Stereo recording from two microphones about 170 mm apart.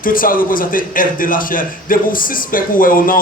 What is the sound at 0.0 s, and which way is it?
A man's voice, 55° left (ahead or behind).